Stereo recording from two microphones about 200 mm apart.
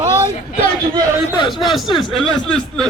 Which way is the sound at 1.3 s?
25° left (ahead or behind).